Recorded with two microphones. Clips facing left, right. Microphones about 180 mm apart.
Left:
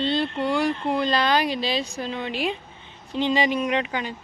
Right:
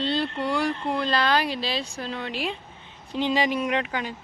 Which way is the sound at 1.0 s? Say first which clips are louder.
Left 1 dB; centre (ahead or behind).